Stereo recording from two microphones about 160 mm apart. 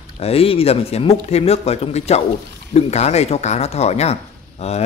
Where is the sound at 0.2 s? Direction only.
35° left (ahead or behind).